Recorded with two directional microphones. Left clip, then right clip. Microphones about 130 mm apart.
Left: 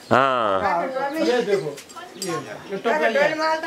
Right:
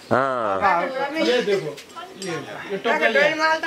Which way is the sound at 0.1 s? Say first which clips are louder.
Left 3 dB; 10° left (ahead or behind).